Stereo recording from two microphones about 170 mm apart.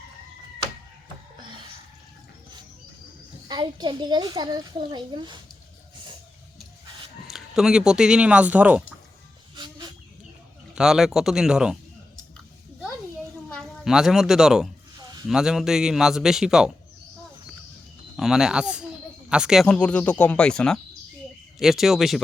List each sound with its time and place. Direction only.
1.4 s a sound: 30° right (ahead or behind)
3.5 s a child's voice: 25° right (ahead or behind)
7.3 s speech: centre (ahead or behind)
9.6 s a sound: 25° right (ahead or behind)
10.8 s a man's voice: 5° right (ahead or behind)
13.5 s speech: centre (ahead or behind)
15.0 s a sound: 25° right (ahead or behind)
15.3 s a man's voice: 5° right (ahead or behind)
18.2 s a man's voice: 5° right (ahead or behind)
19.6 s a man's voice: 5° left (ahead or behind)